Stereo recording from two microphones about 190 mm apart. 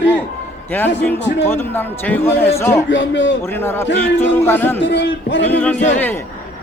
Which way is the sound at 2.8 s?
75° left (ahead or behind).